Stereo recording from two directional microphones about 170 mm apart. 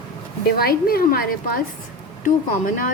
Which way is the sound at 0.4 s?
60° left (ahead or behind).